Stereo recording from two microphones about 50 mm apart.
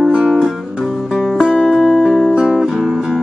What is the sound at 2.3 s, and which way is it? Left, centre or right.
Music, centre.